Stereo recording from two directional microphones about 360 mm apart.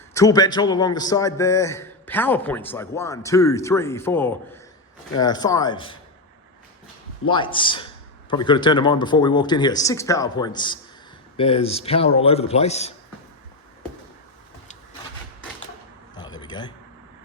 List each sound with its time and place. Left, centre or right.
0.1 s a man's voice: centre
7.3 s a man's voice: centre
16.1 s a sound: centre